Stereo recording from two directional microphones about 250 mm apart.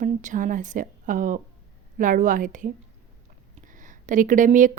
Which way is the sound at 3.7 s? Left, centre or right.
Right.